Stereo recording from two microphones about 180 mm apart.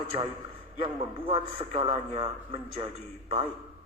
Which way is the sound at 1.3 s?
30° right (ahead or behind).